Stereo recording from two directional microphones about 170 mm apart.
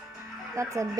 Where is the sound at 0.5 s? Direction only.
20° right (ahead or behind).